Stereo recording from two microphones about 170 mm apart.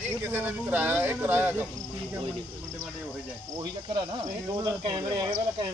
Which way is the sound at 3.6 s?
25° right (ahead or behind).